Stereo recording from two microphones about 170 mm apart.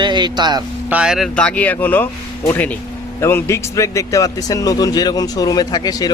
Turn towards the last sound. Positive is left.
turn(degrees=20)  # may be behind; listen again after turning